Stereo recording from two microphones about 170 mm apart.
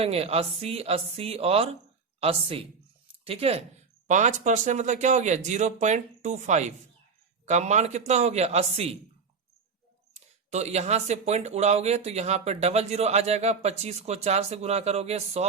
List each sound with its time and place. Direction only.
0.0 s speech: 35° right (ahead or behind)
10.2 s speech: 40° right (ahead or behind)